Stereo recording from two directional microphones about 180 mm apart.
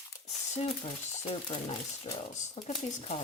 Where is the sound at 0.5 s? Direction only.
40° left (ahead or behind).